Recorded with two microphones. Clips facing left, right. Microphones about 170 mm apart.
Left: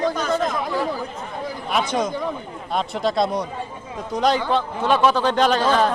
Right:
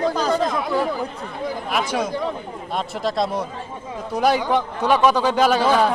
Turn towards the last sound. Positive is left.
turn(degrees=-10)  # may be behind; listen again after turning